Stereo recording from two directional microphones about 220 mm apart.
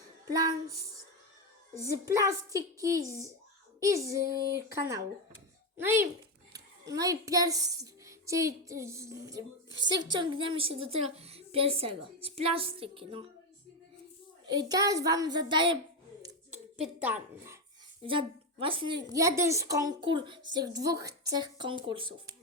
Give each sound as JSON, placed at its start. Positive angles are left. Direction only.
{"t": 0.3, "sound": "a woman's voice", "side_deg": -15}
{"t": 1.7, "sound": "a woman's voice", "side_deg": -15}
{"t": 14.4, "sound": "a woman's voice", "side_deg": -20}
{"t": 16.7, "sound": "speech", "side_deg": -5}
{"t": 18.0, "sound": "a woman's voice", "side_deg": -25}